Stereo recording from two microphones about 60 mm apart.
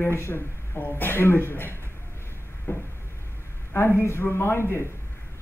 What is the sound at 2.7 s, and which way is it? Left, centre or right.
Speech, left.